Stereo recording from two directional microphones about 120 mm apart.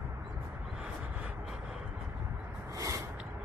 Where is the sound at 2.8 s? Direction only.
30° right (ahead or behind).